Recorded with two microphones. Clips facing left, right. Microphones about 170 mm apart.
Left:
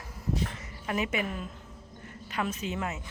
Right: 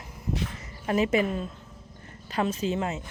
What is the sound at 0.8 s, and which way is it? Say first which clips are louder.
A woman's voice: right 7 dB; 30° right (ahead or behind).